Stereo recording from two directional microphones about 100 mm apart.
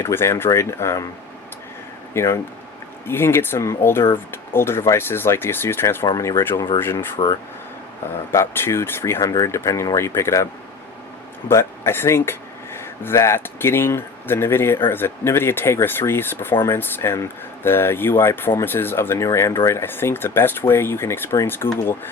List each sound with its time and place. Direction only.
0.0 s speech: 25° left (ahead or behind)
2.1 s speech: 30° left (ahead or behind)
6.1 s speech: 35° left (ahead or behind)
6.7 s speech: 25° left (ahead or behind)
8.3 s speech: 25° left (ahead or behind)
11.4 s speech: 25° left (ahead or behind)